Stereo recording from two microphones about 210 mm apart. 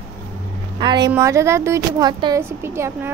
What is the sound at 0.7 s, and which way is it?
A woman's voice, 20° right (ahead or behind).